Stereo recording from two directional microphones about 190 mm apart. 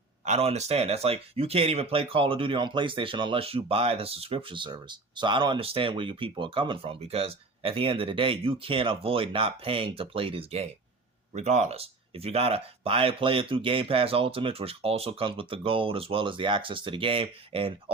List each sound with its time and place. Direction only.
0.3 s speech: 35° right (ahead or behind)